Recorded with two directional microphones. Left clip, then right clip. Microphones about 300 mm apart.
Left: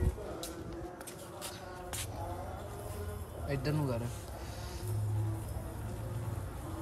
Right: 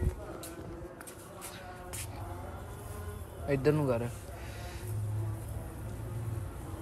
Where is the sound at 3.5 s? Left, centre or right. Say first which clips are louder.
Right 8 dB; centre.